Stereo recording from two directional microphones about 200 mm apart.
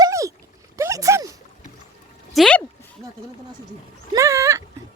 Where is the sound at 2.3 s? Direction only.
5° left (ahead or behind).